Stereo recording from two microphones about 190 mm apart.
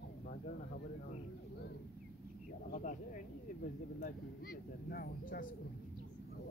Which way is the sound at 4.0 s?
50° left (ahead or behind).